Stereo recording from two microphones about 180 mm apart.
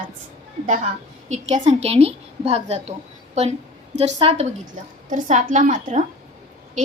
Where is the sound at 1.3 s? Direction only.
40° right (ahead or behind).